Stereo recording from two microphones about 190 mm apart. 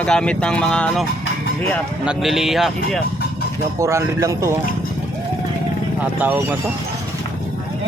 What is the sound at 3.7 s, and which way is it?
Speech, 15° right (ahead or behind).